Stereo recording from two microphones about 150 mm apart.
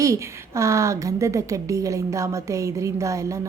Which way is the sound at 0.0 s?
20° right (ahead or behind).